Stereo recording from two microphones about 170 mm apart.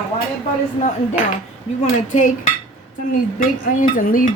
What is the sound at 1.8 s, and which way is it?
Speech, 45° left (ahead or behind).